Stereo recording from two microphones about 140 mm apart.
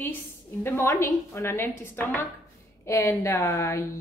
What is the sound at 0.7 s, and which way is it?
A woman's voice, 20° left (ahead or behind).